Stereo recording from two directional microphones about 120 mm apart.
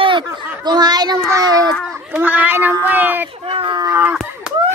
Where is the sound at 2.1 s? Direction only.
15° right (ahead or behind).